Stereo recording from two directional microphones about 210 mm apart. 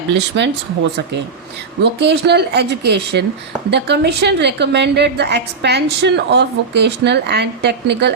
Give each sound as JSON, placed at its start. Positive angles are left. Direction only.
{"t": 0.1, "sound": "speech", "side_deg": -55}
{"t": 1.8, "sound": "a woman's voice", "side_deg": -55}